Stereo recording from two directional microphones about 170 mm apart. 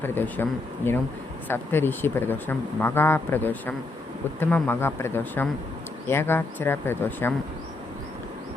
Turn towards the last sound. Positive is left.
turn(degrees=10)  # may be behind; listen again after turning